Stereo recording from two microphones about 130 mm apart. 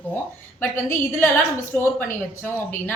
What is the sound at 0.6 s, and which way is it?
A woman's voice, 15° left (ahead or behind).